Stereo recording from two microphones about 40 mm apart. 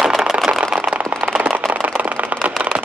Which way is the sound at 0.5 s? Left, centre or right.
Right.